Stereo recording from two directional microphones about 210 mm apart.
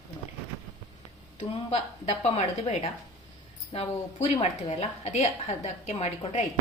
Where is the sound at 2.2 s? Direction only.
30° left (ahead or behind).